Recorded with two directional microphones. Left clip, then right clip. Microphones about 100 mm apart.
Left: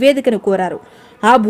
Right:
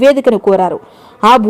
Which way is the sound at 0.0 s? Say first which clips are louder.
Right 4 dB; 15° right (ahead or behind).